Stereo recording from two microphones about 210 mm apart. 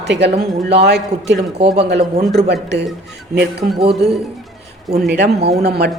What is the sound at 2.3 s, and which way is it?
Speech, 55° right (ahead or behind).